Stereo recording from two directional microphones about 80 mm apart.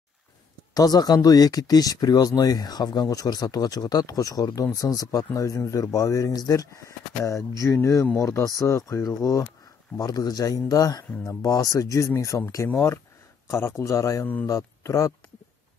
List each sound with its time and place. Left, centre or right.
0.7 s speech: left